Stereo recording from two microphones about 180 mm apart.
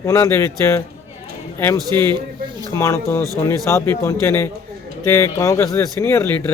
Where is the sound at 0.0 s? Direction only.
15° left (ahead or behind).